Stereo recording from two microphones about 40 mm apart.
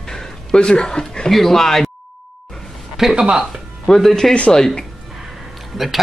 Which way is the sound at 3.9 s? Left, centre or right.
Centre.